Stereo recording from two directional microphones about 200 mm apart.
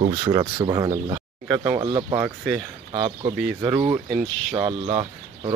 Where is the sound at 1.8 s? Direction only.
20° right (ahead or behind).